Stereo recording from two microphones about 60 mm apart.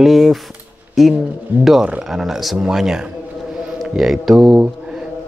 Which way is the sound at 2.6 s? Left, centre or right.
Centre.